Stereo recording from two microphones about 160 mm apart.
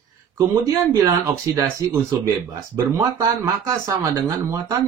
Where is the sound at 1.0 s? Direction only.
25° right (ahead or behind).